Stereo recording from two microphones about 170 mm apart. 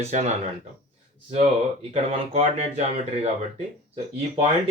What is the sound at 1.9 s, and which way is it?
Speech, 40° right (ahead or behind).